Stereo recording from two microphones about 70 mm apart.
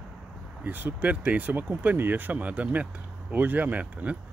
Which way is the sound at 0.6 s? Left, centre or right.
Right.